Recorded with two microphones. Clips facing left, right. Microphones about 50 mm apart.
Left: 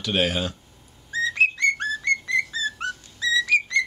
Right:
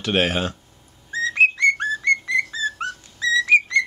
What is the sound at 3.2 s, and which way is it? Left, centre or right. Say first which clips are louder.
Whistle: right 4 dB; right.